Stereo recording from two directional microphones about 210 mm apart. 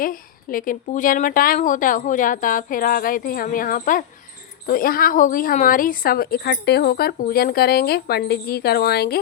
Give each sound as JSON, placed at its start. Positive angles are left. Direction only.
{"t": 0.0, "sound": "a woman's voice", "side_deg": 40}